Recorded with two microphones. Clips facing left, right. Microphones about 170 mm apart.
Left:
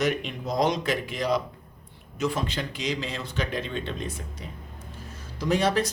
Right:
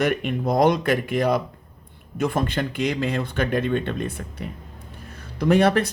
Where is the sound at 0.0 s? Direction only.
55° right (ahead or behind).